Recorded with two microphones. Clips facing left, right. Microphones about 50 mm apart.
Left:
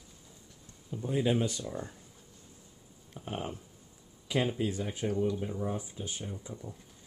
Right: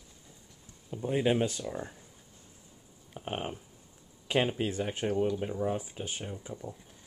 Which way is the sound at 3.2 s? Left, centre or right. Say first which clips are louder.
Right 2 dB; right.